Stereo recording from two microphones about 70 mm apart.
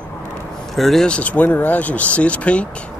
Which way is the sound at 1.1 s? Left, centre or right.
Centre.